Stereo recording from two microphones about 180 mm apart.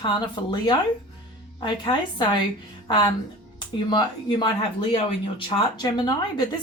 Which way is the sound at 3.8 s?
25° left (ahead or behind).